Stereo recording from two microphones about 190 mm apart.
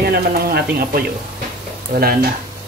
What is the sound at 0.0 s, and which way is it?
Speech, 55° right (ahead or behind).